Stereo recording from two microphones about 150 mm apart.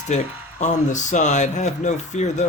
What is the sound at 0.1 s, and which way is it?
Speech, 50° left (ahead or behind).